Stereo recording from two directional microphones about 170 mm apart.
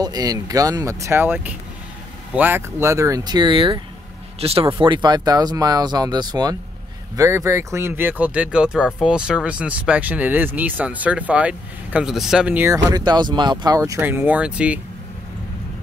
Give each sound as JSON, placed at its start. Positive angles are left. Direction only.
{"t": 0.0, "sound": "speech", "side_deg": -20}